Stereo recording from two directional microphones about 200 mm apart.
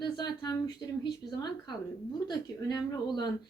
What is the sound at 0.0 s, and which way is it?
Speech, 20° left (ahead or behind).